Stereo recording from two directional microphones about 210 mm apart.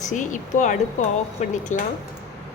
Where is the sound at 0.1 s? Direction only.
35° left (ahead or behind).